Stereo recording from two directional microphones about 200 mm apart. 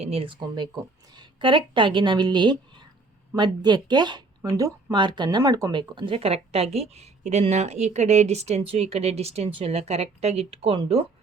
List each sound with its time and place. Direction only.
0.0 s a woman's voice: 30° right (ahead or behind)